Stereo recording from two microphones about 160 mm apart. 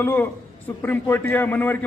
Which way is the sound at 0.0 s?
10° left (ahead or behind).